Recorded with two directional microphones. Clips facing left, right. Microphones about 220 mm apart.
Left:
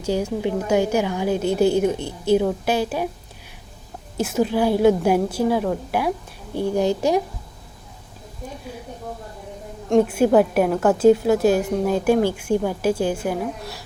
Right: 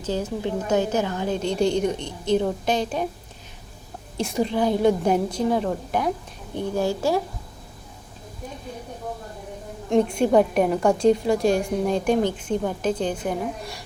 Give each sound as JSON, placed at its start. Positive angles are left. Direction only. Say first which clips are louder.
{"t": 0.0, "sound": "a woman's voice", "louder": "left 4 dB", "side_deg": 10}
{"t": 4.2, "sound": "a woman's voice", "louder": "left 3 dB", "side_deg": 5}
{"t": 6.7, "sound": "a woman's voice", "louder": "left 3 dB", "side_deg": 20}
{"t": 9.9, "sound": "a woman's voice", "louder": "left 3 dB", "side_deg": 5}